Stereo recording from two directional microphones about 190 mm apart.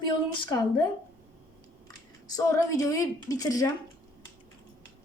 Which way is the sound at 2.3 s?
15° left (ahead or behind).